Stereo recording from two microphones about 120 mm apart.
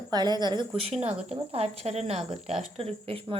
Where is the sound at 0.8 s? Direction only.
60° right (ahead or behind).